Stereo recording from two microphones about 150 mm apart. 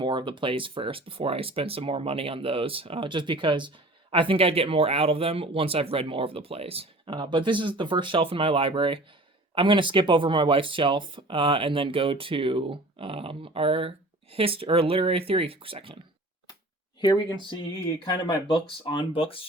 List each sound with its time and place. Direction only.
0.0 s speech: 30° right (ahead or behind)
18.0 s speech: 35° left (ahead or behind)